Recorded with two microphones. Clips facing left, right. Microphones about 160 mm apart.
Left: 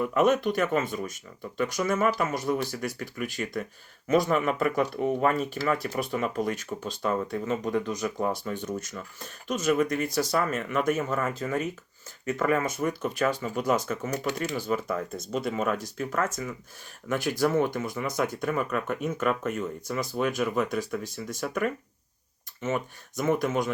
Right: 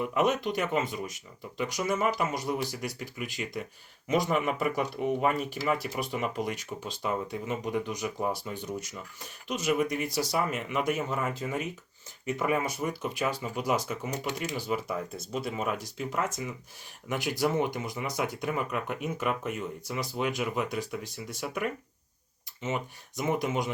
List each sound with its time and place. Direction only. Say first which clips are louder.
0.0 s speech: left 4 dB; 15° right (ahead or behind)
16.0 s speech: left 3 dB; 15° right (ahead or behind)
23.1 s speech: left 3 dB; 15° right (ahead or behind)